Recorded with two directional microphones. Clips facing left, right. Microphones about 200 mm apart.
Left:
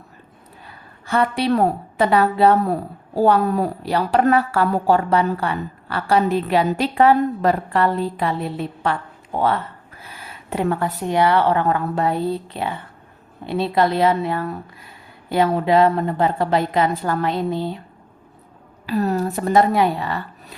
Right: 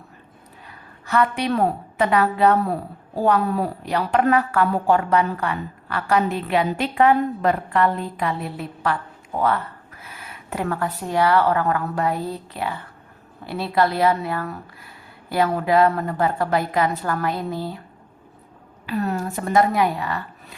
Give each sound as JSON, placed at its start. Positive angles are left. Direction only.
{"t": 1.0, "sound": "a woman's voice", "side_deg": 30}
{"t": 18.9, "sound": "a woman's voice", "side_deg": 35}